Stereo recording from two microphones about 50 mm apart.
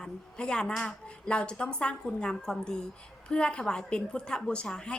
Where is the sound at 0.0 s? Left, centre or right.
Centre.